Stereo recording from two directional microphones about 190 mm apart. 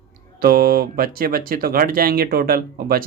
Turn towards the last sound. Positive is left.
turn(degrees=-50)  # may be behind; listen again after turning